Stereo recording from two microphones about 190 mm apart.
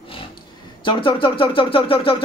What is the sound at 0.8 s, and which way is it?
A man's voice, 25° left (ahead or behind).